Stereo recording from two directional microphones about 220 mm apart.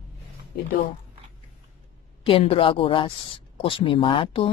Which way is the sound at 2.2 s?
25° left (ahead or behind).